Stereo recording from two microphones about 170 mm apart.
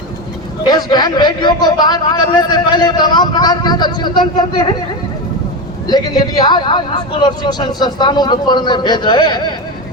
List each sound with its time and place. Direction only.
0.6 s a man's voice: 25° left (ahead or behind)
5.9 s a man's voice: 25° left (ahead or behind)